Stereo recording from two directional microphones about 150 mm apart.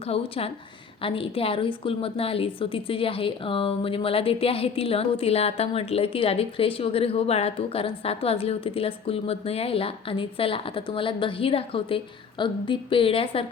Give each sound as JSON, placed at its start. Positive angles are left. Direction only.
{"t": 0.0, "sound": "a woman's voice", "side_deg": 40}